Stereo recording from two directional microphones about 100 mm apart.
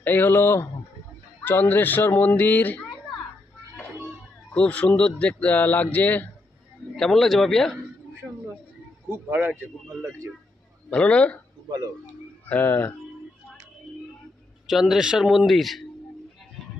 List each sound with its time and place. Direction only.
0.0 s speech: 20° left (ahead or behind)
4.6 s speech: 10° left (ahead or behind)
7.0 s speech: 5° left (ahead or behind)
9.3 s speech: 15° right (ahead or behind)
10.9 s speech: 10° left (ahead or behind)
12.4 s speech: 20° left (ahead or behind)
14.7 s speech: 5° right (ahead or behind)